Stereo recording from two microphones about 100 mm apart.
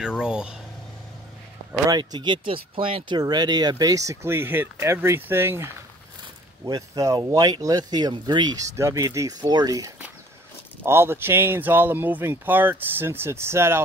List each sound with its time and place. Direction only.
0.0 s speech: 10° right (ahead or behind)
1.9 s speech: 50° right (ahead or behind)
3.2 s speech: 45° right (ahead or behind); by 5.7 s 25° right (ahead or behind)
6.6 s speech: 35° right (ahead or behind)
8.6 s speech: 30° right (ahead or behind)
10.8 s speech: 25° right (ahead or behind)